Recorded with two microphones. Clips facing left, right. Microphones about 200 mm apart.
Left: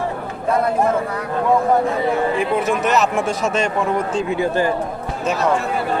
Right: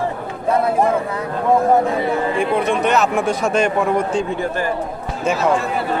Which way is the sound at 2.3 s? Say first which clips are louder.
Right 1 dB; 5° left (ahead or behind).